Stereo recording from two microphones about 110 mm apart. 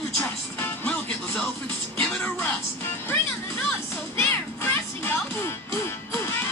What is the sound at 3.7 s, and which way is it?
Music, 20° left (ahead or behind).